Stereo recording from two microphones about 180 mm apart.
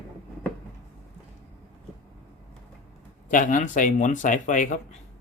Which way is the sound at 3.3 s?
45° left (ahead or behind).